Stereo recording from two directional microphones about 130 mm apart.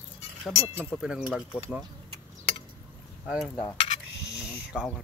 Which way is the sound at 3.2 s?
Centre (ahead or behind).